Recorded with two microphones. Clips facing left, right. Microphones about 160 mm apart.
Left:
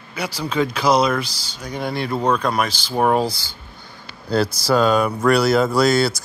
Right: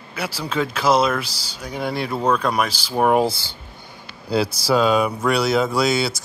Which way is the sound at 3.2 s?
25° right (ahead or behind).